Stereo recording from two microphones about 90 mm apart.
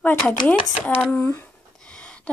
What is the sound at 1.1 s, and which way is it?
Speech, 25° left (ahead or behind).